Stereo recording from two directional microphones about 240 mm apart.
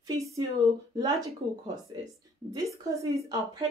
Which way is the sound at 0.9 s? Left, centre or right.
Centre.